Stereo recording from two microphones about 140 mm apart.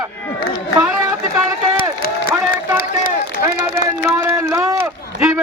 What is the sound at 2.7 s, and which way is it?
Run, 90° left.